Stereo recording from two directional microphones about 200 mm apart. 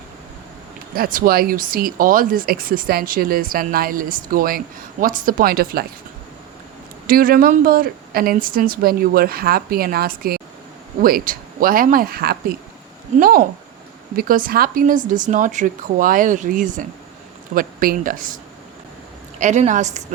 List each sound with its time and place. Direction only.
0.9 s speech: 45° right (ahead or behind)
7.1 s speech: 45° right (ahead or behind)
19.4 s speech: 35° right (ahead or behind)